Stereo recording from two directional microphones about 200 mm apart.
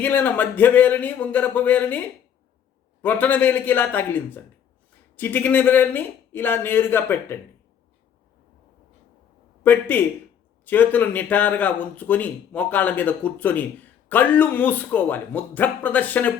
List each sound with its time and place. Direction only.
0.0 s speech: 10° left (ahead or behind)
9.6 s speech: 10° left (ahead or behind)